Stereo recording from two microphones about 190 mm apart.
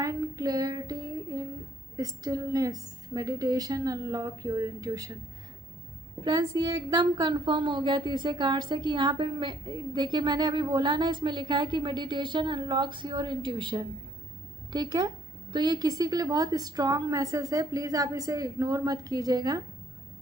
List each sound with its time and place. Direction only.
0.0 s a sound: 20° right (ahead or behind)
2.0 s a woman's voice: 20° right (ahead or behind)
6.2 s a woman's voice: 20° right (ahead or behind)